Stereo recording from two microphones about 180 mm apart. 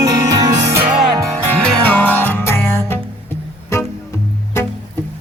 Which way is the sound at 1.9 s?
10° left (ahead or behind).